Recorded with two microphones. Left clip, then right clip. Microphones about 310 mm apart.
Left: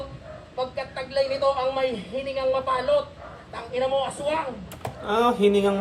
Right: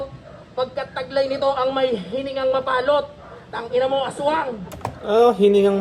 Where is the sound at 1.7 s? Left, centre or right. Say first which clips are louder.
Right 5 dB; right.